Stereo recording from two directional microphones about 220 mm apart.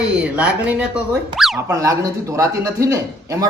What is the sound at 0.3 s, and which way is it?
Speech, 5° right (ahead or behind).